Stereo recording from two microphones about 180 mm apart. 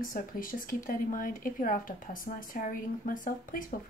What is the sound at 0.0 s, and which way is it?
Speech, 50° left (ahead or behind).